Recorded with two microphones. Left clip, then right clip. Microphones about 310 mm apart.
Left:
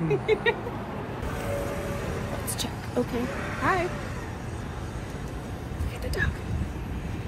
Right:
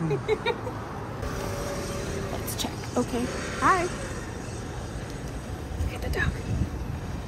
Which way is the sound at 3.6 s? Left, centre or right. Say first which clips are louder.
Right 3 dB; centre.